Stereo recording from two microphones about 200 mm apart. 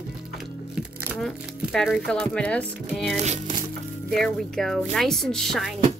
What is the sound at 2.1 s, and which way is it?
A woman's voice, 5° left (ahead or behind).